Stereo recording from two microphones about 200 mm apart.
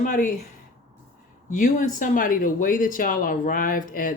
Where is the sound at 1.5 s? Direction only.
40° left (ahead or behind).